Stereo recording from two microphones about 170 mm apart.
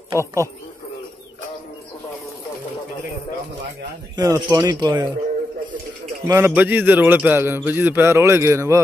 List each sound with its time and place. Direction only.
0.1 s speech: 15° right (ahead or behind)
4.2 s speech: 20° right (ahead or behind)
6.2 s a man's voice: 15° right (ahead or behind)